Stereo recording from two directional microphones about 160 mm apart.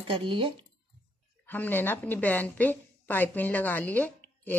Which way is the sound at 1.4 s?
10° left (ahead or behind).